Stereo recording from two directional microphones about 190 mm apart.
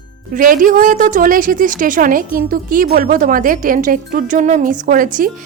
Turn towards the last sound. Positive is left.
turn(degrees=-45)  # may be behind; listen again after turning